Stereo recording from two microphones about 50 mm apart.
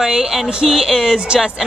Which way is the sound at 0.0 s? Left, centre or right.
Centre.